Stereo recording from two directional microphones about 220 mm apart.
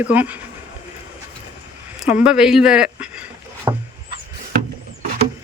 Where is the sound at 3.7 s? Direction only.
20° right (ahead or behind).